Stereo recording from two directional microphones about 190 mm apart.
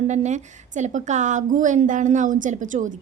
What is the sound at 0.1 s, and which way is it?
A woman's voice, 40° right (ahead or behind).